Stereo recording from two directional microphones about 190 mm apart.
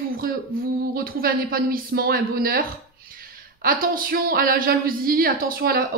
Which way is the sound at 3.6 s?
50° right (ahead or behind).